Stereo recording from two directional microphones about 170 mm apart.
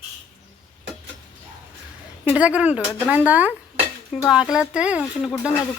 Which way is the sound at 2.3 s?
5° right (ahead or behind).